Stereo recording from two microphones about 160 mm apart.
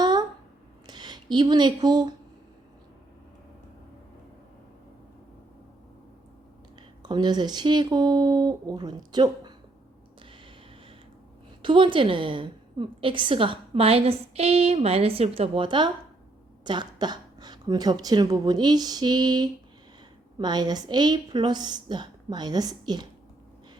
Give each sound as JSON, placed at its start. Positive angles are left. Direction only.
{"t": 0.0, "sound": "a sound", "side_deg": -25}
{"t": 0.9, "sound": "speech", "side_deg": -25}
{"t": 7.0, "sound": "a woman's voice", "side_deg": -25}
{"t": 11.6, "sound": "a woman's voice", "side_deg": -30}